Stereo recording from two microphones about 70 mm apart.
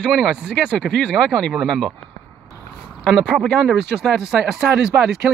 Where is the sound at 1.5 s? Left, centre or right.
Centre.